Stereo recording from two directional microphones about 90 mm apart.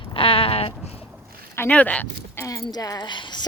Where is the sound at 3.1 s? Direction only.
60° left (ahead or behind).